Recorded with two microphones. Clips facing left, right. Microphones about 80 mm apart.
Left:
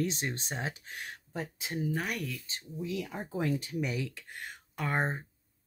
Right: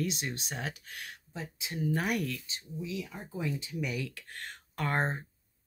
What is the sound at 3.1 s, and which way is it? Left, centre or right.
Speech, left.